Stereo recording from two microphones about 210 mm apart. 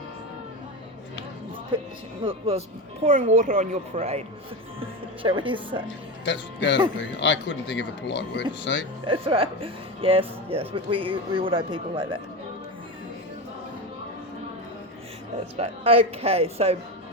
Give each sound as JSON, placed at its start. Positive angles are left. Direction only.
{"t": 1.7, "sound": "speech", "side_deg": -25}
{"t": 5.2, "sound": "speech", "side_deg": -25}
{"t": 6.2, "sound": "speech", "side_deg": 55}
{"t": 9.0, "sound": "speech", "side_deg": -25}
{"t": 15.5, "sound": "speech", "side_deg": -25}